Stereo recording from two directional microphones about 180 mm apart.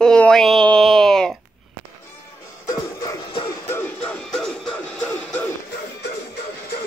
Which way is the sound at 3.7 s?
10° left (ahead or behind).